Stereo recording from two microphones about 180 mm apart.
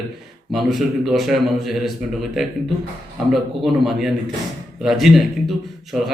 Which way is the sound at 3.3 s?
Centre (ahead or behind).